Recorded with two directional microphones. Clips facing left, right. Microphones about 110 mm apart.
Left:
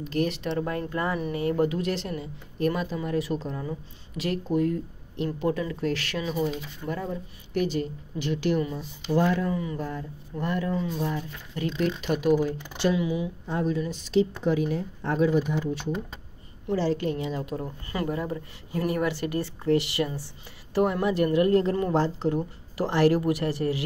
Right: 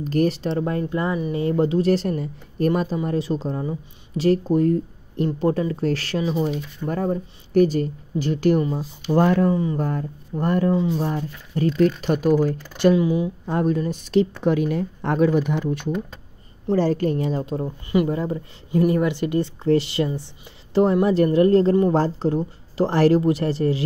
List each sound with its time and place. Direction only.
0.0 s speech: 40° right (ahead or behind)
1.9 s speech: 40° right (ahead or behind)
6.5 s speech: 50° right (ahead or behind)
9.1 s speech: 50° right (ahead or behind)
9.5 s speech: 30° right (ahead or behind)
9.8 s speech: 50° right (ahead or behind)
10.7 s speech: 20° right (ahead or behind)
11.0 s speech: 40° right (ahead or behind)
13.5 s speech: 55° right (ahead or behind)
14.4 s speech: 65° right (ahead or behind)
16.7 s speech: 45° right (ahead or behind); by 23.8 s 30° right (ahead or behind)